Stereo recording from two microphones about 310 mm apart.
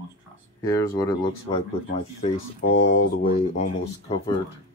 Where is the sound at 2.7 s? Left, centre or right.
Left.